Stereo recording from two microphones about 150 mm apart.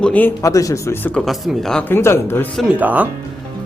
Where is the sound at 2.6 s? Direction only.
10° right (ahead or behind).